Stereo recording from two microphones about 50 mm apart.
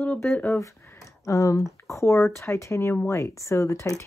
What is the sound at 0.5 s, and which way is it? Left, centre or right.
Speech, left.